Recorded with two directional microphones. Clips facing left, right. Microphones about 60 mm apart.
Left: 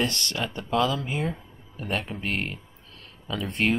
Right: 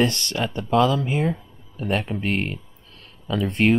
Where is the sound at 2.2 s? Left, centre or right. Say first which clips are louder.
Right 5 dB; right.